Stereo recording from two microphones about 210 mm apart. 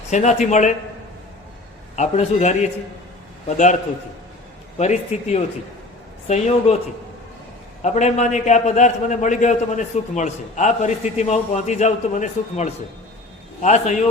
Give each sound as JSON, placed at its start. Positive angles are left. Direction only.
{"t": 0.1, "sound": "a man's voice", "side_deg": 35}
{"t": 2.0, "sound": "a man's voice", "side_deg": 30}
{"t": 4.8, "sound": "a man's voice", "side_deg": 35}
{"t": 7.8, "sound": "a man's voice", "side_deg": 35}